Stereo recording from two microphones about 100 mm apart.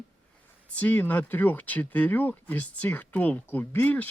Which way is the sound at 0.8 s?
15° left (ahead or behind).